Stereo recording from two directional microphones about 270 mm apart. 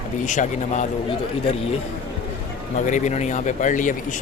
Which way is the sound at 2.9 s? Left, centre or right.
Left.